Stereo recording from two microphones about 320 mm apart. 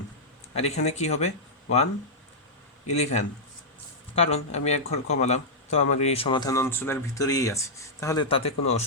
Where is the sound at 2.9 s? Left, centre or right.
Left.